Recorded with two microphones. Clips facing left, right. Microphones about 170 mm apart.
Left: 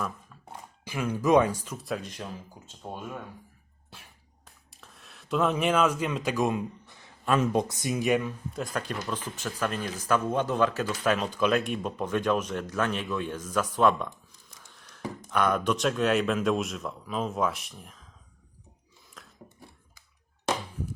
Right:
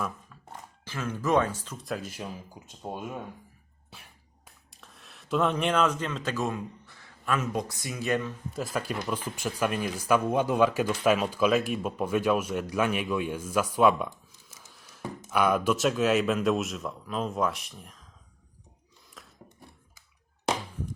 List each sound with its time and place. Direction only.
0.5 s speech: 15° left (ahead or behind)
1.9 s speech: 5° right (ahead or behind)
3.8 s a sound: centre (ahead or behind)
4.8 s speech: centre (ahead or behind)
8.5 s speech: 5° right (ahead or behind)
19.2 s a sound: centre (ahead or behind)